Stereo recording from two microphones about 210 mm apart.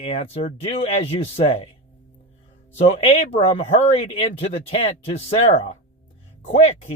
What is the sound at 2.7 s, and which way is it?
A man's voice, 30° left (ahead or behind).